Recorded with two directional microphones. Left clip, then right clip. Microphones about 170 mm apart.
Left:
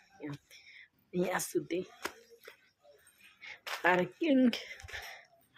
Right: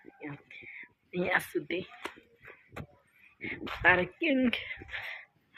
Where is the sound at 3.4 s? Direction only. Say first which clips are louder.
Right 3 dB; 10° left (ahead or behind).